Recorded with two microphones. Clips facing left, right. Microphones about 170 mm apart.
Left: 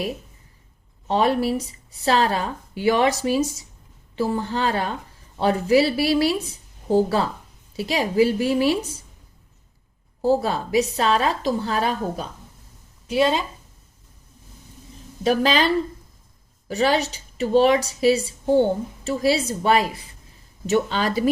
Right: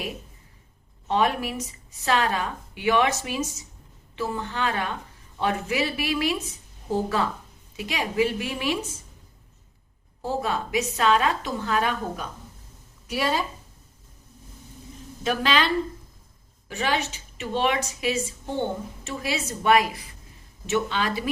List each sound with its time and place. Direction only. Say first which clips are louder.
1.0 s a woman's voice: left 4 dB; 35° left (ahead or behind)
10.2 s a woman's voice: left 7 dB; 35° left (ahead or behind)
15.2 s a woman's voice: left 5 dB; 40° left (ahead or behind)
20.7 s a woman's voice: left 4 dB; 40° left (ahead or behind)